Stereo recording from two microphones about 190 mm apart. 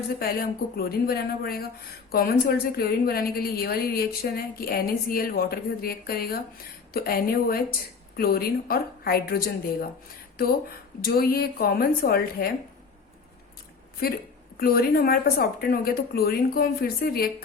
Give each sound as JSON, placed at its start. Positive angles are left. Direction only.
{"t": 0.2, "sound": "a woman's voice", "side_deg": 55}
{"t": 14.6, "sound": "a woman's voice", "side_deg": 50}